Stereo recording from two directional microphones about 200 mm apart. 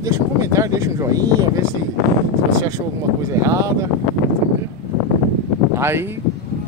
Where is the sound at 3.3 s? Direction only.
15° right (ahead or behind).